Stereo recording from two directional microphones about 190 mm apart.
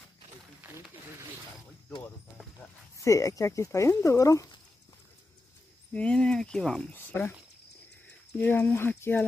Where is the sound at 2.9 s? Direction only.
15° left (ahead or behind).